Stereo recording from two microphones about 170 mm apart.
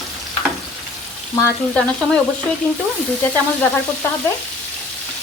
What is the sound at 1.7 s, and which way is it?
Speech, 5° left (ahead or behind).